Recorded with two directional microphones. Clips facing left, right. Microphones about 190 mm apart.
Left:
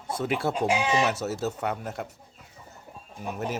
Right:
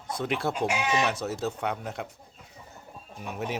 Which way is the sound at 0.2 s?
5° left (ahead or behind).